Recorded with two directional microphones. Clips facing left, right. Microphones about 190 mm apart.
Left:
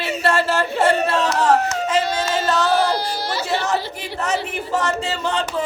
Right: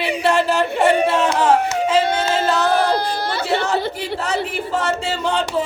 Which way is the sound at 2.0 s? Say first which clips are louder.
Right 2 dB; 55° right (ahead or behind).